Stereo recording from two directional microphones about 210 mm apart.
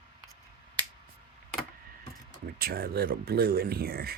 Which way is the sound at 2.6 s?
45° right (ahead or behind).